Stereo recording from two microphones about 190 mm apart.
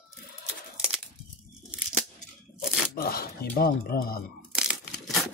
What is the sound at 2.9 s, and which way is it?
Speech, 50° left (ahead or behind).